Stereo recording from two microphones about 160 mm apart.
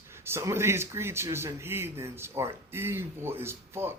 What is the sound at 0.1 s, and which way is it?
Speech, 15° right (ahead or behind).